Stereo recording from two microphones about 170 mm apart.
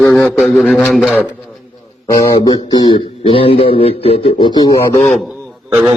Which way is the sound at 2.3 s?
25° left (ahead or behind).